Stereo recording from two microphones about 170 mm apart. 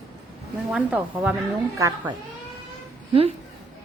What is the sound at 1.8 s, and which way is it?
Speech, 20° right (ahead or behind).